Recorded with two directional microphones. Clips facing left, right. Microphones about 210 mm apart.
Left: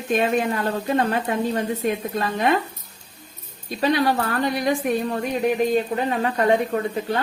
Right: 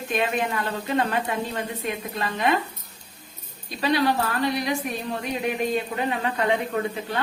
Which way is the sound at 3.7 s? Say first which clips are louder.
Left 2 dB; 45° left (ahead or behind).